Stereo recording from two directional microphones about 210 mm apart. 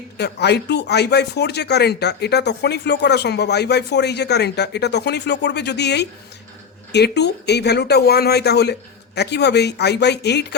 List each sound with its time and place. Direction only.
0.2 s speech: 50° left (ahead or behind)